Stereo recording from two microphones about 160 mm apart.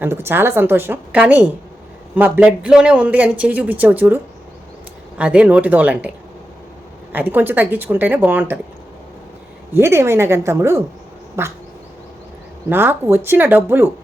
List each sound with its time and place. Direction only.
0.0 s speech: 15° right (ahead or behind)
7.1 s speech: 10° right (ahead or behind)
9.7 s speech: 15° right (ahead or behind)
12.6 s speech: 15° right (ahead or behind)